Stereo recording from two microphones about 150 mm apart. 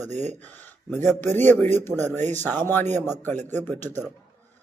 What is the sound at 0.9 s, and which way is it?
A man's voice, 15° left (ahead or behind).